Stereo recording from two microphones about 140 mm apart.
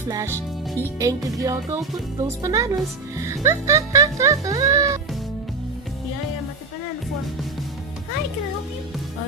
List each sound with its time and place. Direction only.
0.9 s speech: 25° right (ahead or behind)